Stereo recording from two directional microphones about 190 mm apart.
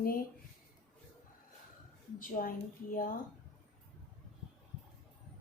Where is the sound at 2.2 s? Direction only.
45° left (ahead or behind).